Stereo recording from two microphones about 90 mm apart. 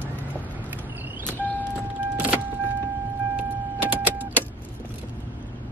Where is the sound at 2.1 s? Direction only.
20° right (ahead or behind).